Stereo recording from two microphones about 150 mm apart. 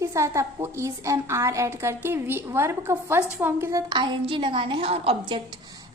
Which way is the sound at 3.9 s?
30° right (ahead or behind).